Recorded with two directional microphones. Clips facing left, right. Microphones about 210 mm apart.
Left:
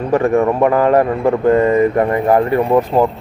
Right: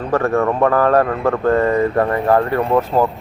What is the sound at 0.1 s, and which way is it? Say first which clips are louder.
Speech: left 3 dB; 15° left (ahead or behind).